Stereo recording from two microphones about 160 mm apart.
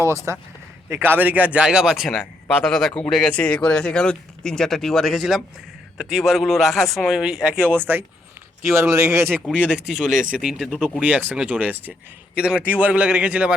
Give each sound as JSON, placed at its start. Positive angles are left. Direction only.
{"t": 0.0, "sound": "speech", "side_deg": -20}
{"t": 9.3, "sound": "speech", "side_deg": -5}
{"t": 10.1, "sound": "speech", "side_deg": -55}
{"t": 10.3, "sound": "speech", "side_deg": -5}